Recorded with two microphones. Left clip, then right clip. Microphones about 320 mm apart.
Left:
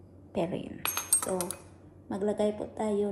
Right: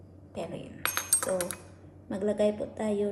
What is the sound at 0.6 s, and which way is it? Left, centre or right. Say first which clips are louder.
Coin: right 2 dB; centre.